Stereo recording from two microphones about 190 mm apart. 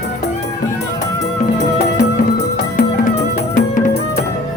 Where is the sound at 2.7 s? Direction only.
45° left (ahead or behind).